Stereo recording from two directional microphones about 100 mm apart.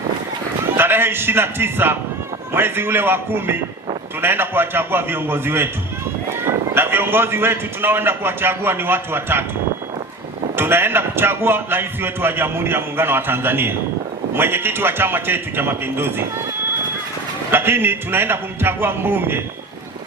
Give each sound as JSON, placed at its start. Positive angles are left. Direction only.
{"t": 0.8, "sound": "a man's voice", "side_deg": -20}
{"t": 10.5, "sound": "a man's voice", "side_deg": -25}
{"t": 17.5, "sound": "a man's voice", "side_deg": -20}